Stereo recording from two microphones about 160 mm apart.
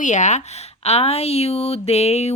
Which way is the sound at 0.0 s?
50° left (ahead or behind).